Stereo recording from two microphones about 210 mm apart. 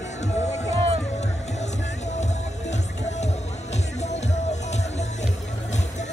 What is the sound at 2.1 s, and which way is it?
Music, 35° left (ahead or behind).